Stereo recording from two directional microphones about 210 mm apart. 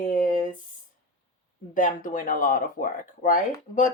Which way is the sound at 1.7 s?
40° left (ahead or behind).